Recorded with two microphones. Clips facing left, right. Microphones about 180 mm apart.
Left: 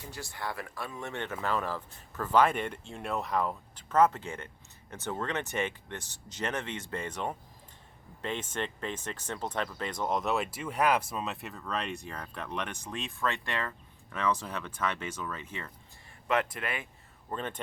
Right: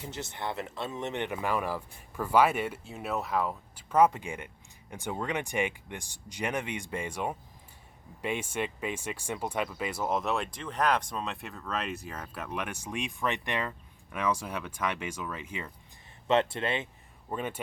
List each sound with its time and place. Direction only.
0.0 s speech: 20° right (ahead or behind)
16.2 s speech: 25° right (ahead or behind)
17.2 s speech: 10° right (ahead or behind)